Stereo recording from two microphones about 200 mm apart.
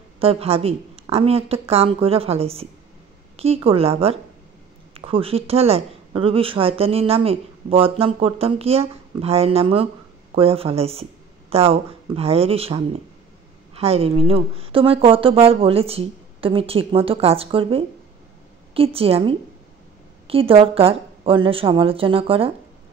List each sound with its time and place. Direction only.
0.2 s speech: 30° right (ahead or behind)
18.9 s speech: 30° right (ahead or behind)